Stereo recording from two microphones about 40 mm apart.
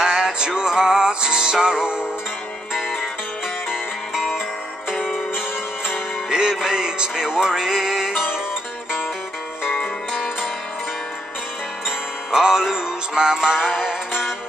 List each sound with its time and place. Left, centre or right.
0.0 s music: centre
5.9 s music: centre
12.4 s music: centre